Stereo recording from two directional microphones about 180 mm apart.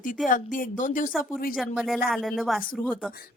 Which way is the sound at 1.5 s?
Centre (ahead or behind).